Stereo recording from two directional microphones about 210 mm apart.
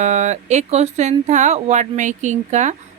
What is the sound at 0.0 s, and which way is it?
Speech, 35° right (ahead or behind).